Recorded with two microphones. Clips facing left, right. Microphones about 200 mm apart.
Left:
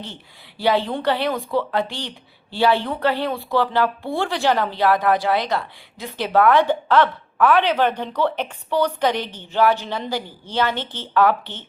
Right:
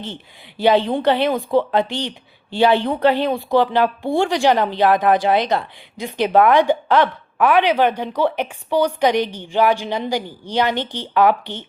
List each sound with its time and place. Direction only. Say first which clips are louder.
0.6 s a woman's voice: right 4 dB; 20° right (ahead or behind)